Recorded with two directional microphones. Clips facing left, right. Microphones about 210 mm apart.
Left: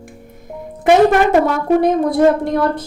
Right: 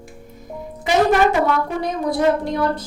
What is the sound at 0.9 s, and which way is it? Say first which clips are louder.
A woman's voice: left 5 dB; 55° left (ahead or behind).